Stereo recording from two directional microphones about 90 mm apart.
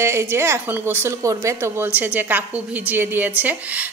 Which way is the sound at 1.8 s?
20° right (ahead or behind).